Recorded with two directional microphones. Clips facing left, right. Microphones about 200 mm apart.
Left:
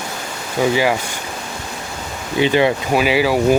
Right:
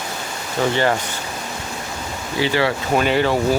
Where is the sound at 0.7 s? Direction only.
10° left (ahead or behind).